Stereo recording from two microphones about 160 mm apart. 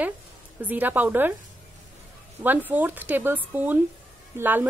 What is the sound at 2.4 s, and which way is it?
A woman's voice, 10° right (ahead or behind).